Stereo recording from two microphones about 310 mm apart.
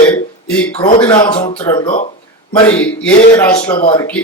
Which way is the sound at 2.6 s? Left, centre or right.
Centre.